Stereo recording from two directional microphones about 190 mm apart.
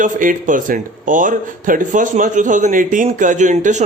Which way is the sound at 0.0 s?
45° right (ahead or behind).